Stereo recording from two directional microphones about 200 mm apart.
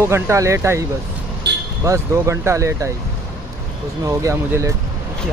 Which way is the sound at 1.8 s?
15° right (ahead or behind).